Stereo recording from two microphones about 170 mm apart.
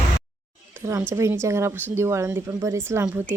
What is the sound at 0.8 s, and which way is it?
Speech, 15° right (ahead or behind).